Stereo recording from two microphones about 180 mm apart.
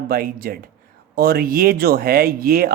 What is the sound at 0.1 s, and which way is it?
Speech, 55° right (ahead or behind).